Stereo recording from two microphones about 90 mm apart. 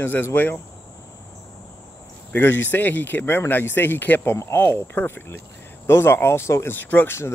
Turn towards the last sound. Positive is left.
turn(degrees=30)  # may be behind; listen again after turning